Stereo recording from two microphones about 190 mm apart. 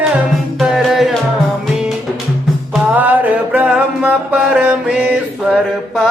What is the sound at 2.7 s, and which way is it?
Music, 10° right (ahead or behind).